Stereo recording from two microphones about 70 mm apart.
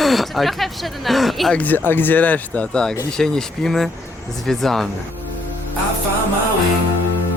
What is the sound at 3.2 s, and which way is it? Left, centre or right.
Speech, centre.